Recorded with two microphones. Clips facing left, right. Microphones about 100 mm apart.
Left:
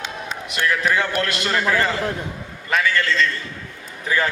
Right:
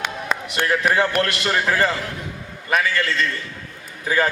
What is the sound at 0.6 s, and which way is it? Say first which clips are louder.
A man's voice: right 1 dB; 30° right (ahead or behind).